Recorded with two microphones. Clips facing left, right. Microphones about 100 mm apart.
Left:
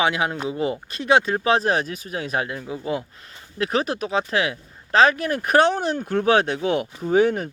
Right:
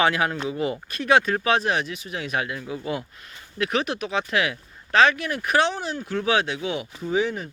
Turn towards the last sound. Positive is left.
turn(degrees=55)  # may be behind; listen again after turning